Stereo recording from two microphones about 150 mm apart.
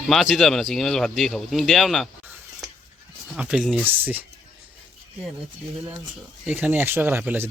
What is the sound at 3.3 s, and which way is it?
Speech, 5° right (ahead or behind).